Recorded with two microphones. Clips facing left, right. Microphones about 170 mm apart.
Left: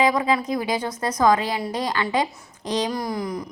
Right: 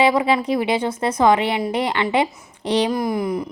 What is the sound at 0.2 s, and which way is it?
A woman's voice, 25° right (ahead or behind).